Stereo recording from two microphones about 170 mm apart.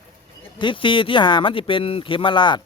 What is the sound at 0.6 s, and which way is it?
Speech, 30° left (ahead or behind).